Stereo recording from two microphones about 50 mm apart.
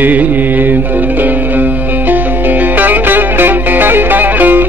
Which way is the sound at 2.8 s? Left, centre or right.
Right.